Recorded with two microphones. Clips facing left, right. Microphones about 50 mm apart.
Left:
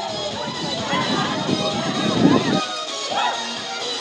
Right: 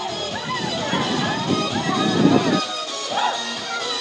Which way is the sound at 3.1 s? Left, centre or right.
Left.